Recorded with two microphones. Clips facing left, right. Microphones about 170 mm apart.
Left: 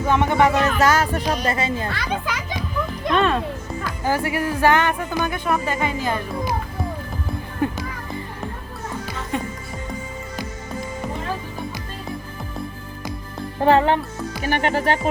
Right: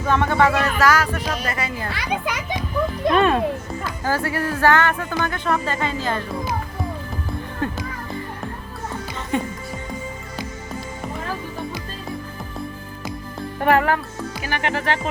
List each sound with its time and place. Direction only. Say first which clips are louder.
0.0 s speech: left 1 dB; 15° left (ahead or behind)
1.9 s a child's voice: right 1 dB; 10° right (ahead or behind)
4.0 s speech: left 1 dB; 15° left (ahead or behind)
7.6 s speech: left 3 dB; 10° left (ahead or behind)
9.3 s speech: right 3 dB; centre (ahead or behind)
13.6 s speech: left 2 dB; 25° left (ahead or behind)